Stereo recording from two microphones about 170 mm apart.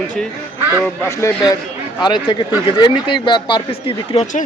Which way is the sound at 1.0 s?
15° left (ahead or behind).